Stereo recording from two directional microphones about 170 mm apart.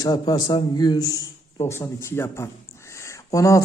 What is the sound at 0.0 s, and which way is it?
A man's voice, 25° left (ahead or behind).